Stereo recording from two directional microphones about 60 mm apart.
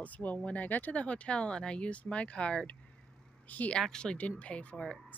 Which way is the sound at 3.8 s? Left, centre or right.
Centre.